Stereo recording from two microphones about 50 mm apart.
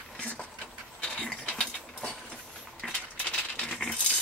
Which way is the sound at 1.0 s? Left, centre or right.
Centre.